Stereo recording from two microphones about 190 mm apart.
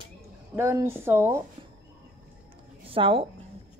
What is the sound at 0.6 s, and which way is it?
Speech, 15° right (ahead or behind).